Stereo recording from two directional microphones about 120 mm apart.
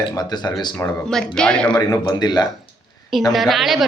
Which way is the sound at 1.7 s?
35° left (ahead or behind).